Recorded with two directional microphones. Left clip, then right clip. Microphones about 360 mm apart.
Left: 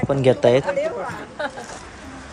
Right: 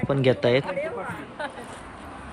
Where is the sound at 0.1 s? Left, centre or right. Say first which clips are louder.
Left 5 dB; centre.